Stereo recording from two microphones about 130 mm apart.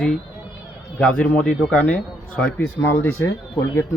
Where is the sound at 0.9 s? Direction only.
10° left (ahead or behind).